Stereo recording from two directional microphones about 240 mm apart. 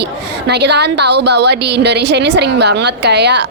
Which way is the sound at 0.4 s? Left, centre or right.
Right.